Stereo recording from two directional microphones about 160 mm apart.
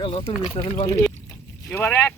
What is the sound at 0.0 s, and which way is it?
Speech, 30° left (ahead or behind).